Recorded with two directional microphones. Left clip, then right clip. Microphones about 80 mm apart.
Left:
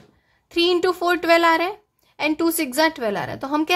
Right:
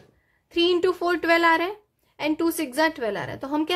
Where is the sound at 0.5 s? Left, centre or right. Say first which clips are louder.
Left 2 dB; left.